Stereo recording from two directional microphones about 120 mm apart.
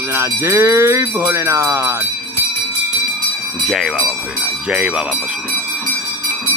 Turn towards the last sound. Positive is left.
turn(degrees=-10)  # may be behind; listen again after turning